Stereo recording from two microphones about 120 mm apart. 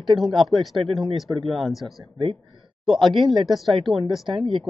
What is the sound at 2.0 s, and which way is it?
Speech, 45° right (ahead or behind).